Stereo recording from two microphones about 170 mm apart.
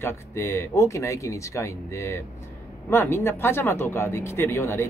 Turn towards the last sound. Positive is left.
turn(degrees=15)  # may be behind; listen again after turning